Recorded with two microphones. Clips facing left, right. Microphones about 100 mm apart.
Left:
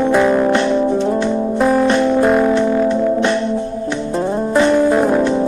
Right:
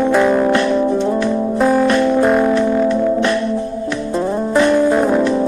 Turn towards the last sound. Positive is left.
turn(degrees=0)  # may be behind; listen again after turning